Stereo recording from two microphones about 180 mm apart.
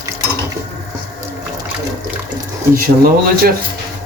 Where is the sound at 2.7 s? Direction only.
55° right (ahead or behind).